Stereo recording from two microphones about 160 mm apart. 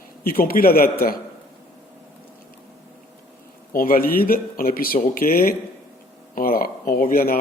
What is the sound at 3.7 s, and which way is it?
Speech, 65° left (ahead or behind).